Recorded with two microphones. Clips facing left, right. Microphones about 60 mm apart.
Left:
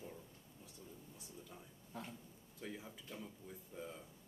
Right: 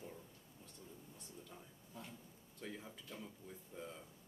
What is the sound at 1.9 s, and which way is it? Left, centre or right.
Speech, left.